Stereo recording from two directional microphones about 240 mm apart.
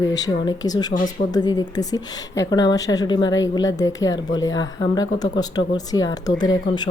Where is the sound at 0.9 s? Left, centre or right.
Left.